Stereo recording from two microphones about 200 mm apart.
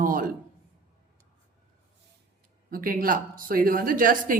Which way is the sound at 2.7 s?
45° right (ahead or behind).